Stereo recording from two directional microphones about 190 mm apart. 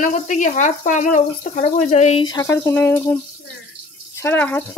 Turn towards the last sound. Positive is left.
turn(degrees=10)  # may be behind; listen again after turning